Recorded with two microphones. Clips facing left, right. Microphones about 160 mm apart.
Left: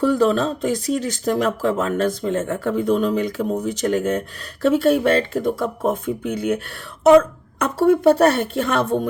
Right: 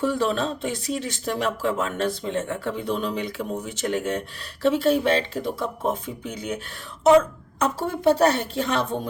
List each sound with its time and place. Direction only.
0.0 s speech: 40° left (ahead or behind)